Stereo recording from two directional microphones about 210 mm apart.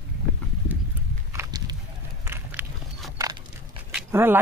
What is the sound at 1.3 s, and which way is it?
Walk, 15° right (ahead or behind).